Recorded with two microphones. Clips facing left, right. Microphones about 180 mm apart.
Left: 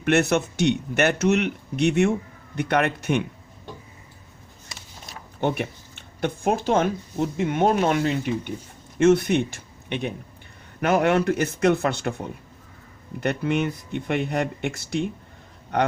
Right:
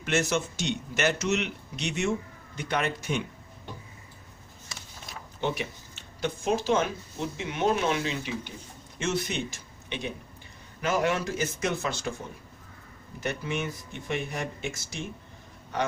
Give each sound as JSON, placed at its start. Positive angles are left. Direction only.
{"t": 0.0, "sound": "a man's voice", "side_deg": 60}
{"t": 5.4, "sound": "a man's voice", "side_deg": 55}